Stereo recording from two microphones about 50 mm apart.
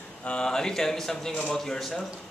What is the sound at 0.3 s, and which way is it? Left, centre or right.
Speech, centre.